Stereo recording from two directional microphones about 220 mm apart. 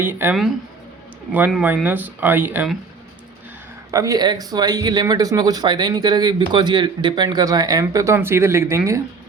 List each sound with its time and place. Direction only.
0.0 s speech: 10° right (ahead or behind)
3.9 s speech: 15° right (ahead or behind)